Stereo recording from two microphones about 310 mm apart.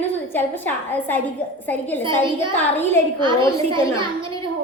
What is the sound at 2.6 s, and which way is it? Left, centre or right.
Speech, centre.